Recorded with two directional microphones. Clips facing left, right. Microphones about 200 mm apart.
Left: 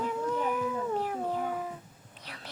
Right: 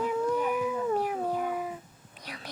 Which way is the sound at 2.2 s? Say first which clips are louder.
Right 4 dB; 15° right (ahead or behind).